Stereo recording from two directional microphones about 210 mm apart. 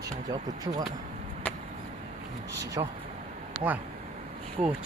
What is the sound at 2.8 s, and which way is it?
Speech, 20° right (ahead or behind).